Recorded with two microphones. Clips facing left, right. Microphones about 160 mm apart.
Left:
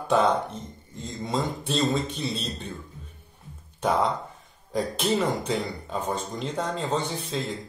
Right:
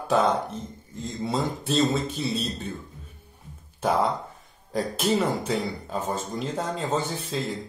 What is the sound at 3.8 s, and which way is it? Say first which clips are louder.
Speech: even; centre (ahead or behind).